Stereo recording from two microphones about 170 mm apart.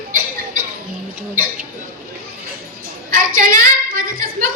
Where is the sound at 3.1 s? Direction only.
55° right (ahead or behind).